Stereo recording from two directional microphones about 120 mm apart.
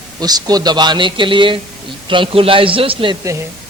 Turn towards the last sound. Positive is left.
turn(degrees=-45)  # may be behind; listen again after turning